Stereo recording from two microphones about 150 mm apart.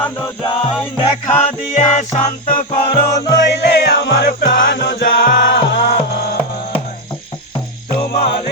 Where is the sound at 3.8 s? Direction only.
80° left; by 5.3 s 65° left (ahead or behind).